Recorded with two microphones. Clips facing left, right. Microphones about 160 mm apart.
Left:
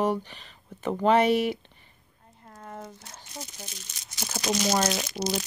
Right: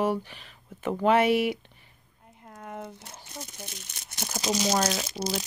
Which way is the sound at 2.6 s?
10° right (ahead or behind).